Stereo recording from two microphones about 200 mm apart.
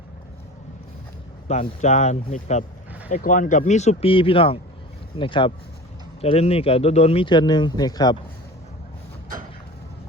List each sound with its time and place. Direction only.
1.5 s speech: 35° left (ahead or behind)